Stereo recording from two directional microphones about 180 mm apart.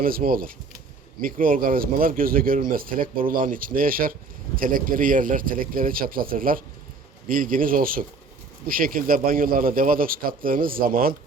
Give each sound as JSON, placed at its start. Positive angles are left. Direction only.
{"t": 0.0, "sound": "speech", "side_deg": -55}